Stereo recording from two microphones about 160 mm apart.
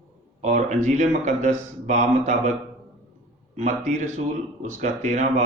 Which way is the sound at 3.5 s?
45° right (ahead or behind).